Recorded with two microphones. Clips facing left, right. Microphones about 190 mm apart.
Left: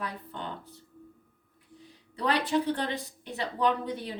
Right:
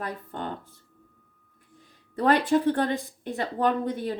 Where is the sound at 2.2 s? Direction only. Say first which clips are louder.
Right 6 dB; 50° right (ahead or behind).